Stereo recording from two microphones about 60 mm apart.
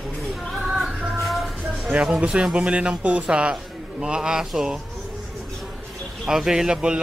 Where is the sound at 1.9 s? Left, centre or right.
Centre.